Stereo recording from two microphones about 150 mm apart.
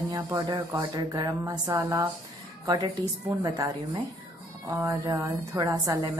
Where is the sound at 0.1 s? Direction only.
25° right (ahead or behind).